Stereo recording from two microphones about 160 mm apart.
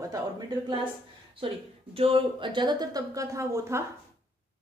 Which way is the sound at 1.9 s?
35° right (ahead or behind).